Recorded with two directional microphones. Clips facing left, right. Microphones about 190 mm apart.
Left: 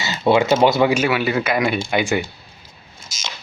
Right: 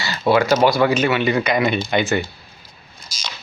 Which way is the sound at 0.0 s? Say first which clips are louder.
Left 1 dB; 20° left (ahead or behind).